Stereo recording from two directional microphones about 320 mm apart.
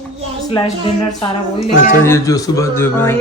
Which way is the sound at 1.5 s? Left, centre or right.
Left.